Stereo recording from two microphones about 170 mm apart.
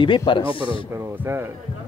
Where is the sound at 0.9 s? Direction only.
15° right (ahead or behind).